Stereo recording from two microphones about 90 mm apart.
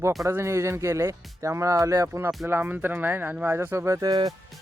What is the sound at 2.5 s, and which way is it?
Speech, 20° right (ahead or behind).